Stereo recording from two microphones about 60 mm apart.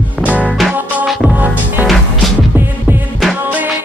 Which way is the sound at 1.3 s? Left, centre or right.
Right.